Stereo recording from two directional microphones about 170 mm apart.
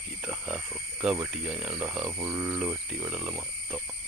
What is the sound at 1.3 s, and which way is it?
Speech, 5° right (ahead or behind).